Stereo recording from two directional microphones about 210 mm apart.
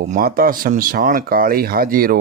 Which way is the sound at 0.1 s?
45° right (ahead or behind).